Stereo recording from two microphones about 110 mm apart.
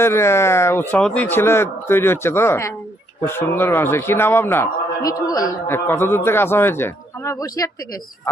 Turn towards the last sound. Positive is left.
turn(degrees=30)  # may be behind; listen again after turning